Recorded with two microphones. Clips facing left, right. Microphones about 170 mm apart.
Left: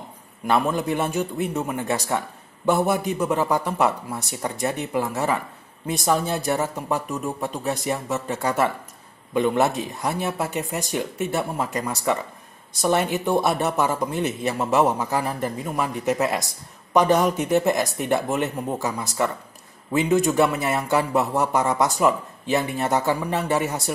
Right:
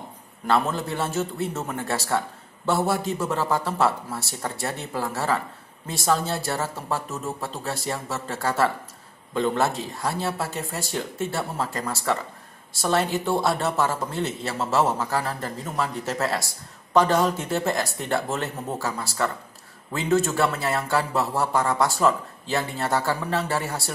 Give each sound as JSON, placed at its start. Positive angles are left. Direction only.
{"t": 0.5, "sound": "a man's voice", "side_deg": 15}